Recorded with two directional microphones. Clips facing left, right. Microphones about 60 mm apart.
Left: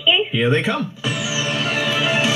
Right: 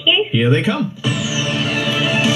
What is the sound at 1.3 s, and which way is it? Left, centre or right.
Music, left.